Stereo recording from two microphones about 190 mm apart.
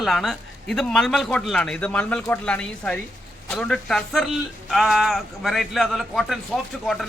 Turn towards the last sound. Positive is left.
turn(degrees=0)  # may be behind; listen again after turning